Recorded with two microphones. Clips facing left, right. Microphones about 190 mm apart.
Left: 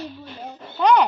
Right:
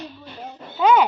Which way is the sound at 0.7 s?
5° right (ahead or behind).